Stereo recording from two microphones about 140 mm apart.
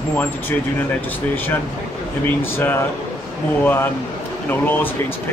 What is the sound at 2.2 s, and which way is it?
Speech, 15° left (ahead or behind).